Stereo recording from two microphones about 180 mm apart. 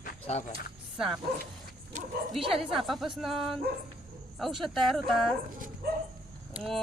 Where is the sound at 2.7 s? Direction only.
Centre (ahead or behind).